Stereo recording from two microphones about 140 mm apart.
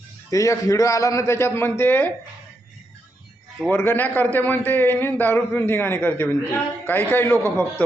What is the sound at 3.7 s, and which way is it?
A man's voice, 15° left (ahead or behind).